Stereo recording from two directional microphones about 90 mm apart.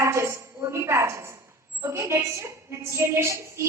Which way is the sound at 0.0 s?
30° right (ahead or behind).